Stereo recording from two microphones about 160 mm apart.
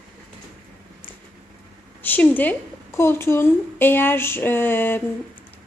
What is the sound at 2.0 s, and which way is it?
A woman's voice, 10° left (ahead or behind).